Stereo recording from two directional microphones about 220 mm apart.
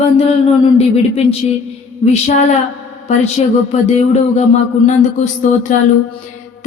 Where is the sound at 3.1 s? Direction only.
30° left (ahead or behind).